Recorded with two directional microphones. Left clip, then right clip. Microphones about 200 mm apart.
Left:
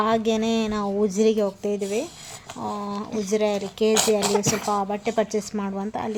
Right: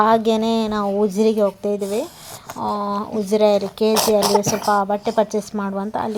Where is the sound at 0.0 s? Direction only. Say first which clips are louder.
Right 6 dB; 15° right (ahead or behind).